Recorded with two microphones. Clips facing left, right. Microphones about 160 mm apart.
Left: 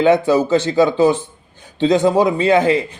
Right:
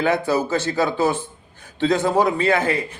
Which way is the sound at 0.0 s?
20° left (ahead or behind).